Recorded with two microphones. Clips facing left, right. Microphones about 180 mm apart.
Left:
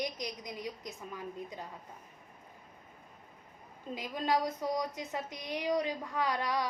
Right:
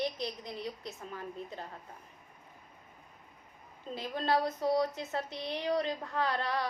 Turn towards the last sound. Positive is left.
turn(degrees=15)  # may be behind; listen again after turning